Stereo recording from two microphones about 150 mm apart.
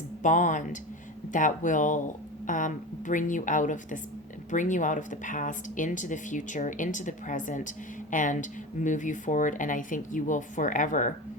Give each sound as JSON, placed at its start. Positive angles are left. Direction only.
{"t": 0.2, "sound": "speech", "side_deg": 55}